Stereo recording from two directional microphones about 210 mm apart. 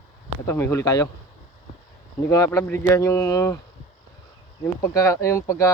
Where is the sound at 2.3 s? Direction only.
15° left (ahead or behind).